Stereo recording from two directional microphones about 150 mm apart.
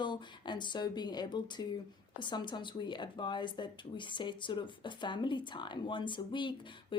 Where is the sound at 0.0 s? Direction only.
30° left (ahead or behind).